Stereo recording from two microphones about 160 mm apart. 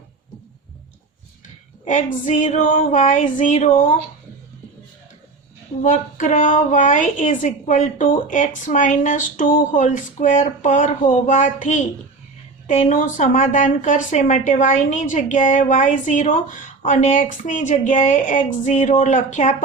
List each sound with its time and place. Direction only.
1.8 s a woman's voice: 50° left (ahead or behind)
5.8 s a woman's voice: 55° left (ahead or behind)